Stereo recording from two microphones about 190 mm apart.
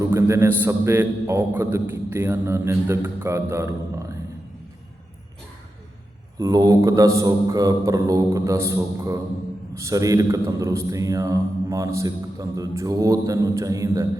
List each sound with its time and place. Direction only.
0.0 s a man's voice: 15° right (ahead or behind)
6.4 s a man's voice: 20° right (ahead or behind)